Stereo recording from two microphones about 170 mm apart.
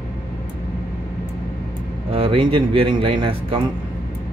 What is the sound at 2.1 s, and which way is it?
Speech, 30° right (ahead or behind).